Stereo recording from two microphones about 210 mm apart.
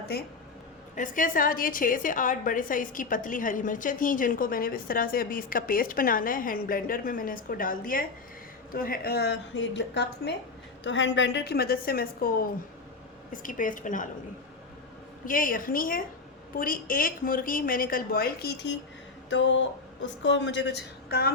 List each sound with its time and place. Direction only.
0.1 s a woman's voice: 50° left (ahead or behind)
15.3 s a woman's voice: 40° left (ahead or behind)
19.3 s a woman's voice: 60° left (ahead or behind)